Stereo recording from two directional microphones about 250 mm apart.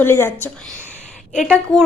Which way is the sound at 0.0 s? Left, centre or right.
Centre.